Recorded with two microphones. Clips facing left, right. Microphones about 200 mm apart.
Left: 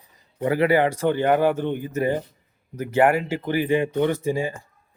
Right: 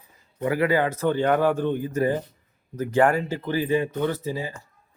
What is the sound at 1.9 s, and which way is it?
Speech, 25° left (ahead or behind).